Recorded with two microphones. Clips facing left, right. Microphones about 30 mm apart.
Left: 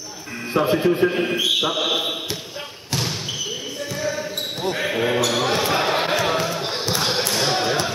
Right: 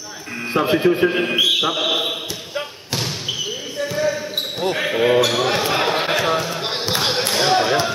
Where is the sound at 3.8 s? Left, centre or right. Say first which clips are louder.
Right 7 dB; right.